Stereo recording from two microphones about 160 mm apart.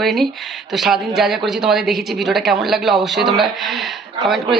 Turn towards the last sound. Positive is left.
turn(degrees=0)  # may be behind; listen again after turning